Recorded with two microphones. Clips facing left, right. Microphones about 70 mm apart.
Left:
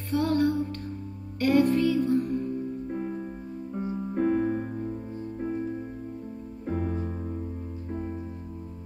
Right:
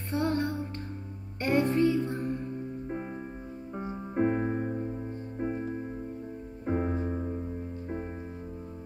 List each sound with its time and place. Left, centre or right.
0.1 s music: right
3.7 s music: right
4.1 s piano: right
6.6 s music: right